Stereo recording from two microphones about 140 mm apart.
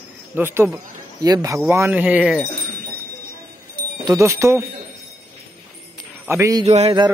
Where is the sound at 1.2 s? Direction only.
25° right (ahead or behind).